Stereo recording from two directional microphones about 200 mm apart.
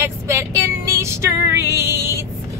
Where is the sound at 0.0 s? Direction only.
15° right (ahead or behind).